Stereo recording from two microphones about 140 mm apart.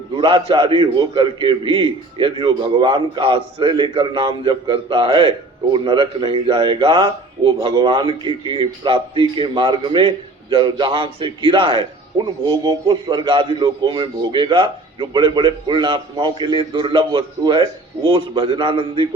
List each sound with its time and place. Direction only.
0.2 s a man's voice: 40° right (ahead or behind)